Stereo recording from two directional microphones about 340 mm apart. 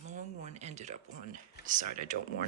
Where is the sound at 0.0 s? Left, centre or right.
Right.